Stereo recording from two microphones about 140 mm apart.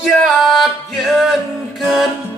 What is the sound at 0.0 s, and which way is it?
Music, centre (ahead or behind).